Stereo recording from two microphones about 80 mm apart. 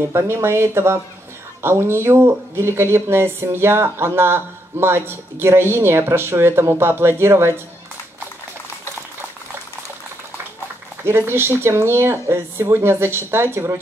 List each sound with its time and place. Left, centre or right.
0.1 s speech: right
11.1 s speech: right